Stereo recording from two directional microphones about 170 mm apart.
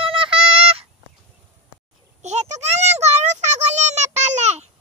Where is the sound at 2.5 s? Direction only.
40° right (ahead or behind).